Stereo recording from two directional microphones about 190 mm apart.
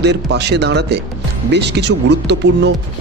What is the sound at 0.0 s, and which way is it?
Speech, 65° right (ahead or behind).